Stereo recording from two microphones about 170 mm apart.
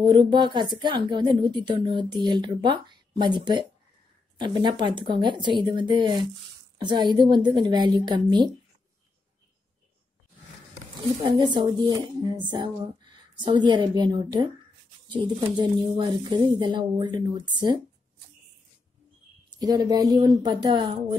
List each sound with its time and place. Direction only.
0.0 s a woman's voice: 25° right (ahead or behind)
11.0 s a woman's voice: 25° right (ahead or behind)
19.5 s a woman's voice: 25° right (ahead or behind)